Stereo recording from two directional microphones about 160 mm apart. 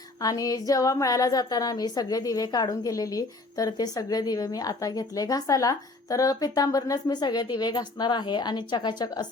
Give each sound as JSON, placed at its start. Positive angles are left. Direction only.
{"t": 0.2, "sound": "a woman's voice", "side_deg": 25}